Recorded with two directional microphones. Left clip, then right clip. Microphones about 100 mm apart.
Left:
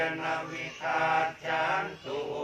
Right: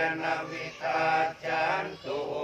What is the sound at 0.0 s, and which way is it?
Mantra, 15° right (ahead or behind).